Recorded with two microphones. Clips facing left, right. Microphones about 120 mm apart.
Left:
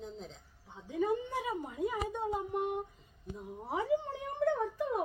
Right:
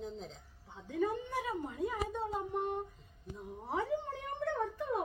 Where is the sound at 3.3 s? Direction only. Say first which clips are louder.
Left 1 dB; 5° left (ahead or behind).